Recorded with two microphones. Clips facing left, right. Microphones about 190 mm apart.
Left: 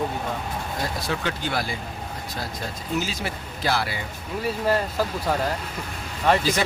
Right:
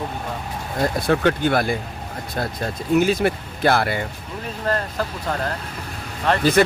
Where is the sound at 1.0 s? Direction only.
55° right (ahead or behind).